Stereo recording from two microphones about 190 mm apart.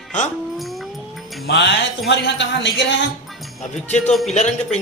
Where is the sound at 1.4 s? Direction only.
65° left (ahead or behind).